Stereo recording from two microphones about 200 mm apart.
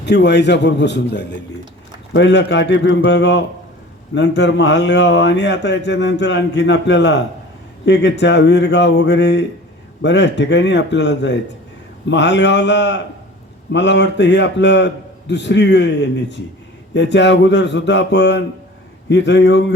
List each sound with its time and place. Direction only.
0.0 s a man's voice: 60° left (ahead or behind)